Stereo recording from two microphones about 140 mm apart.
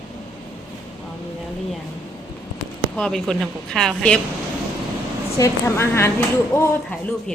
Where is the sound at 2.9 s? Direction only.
5° left (ahead or behind).